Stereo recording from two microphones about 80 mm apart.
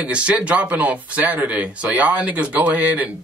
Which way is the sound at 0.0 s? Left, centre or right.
Centre.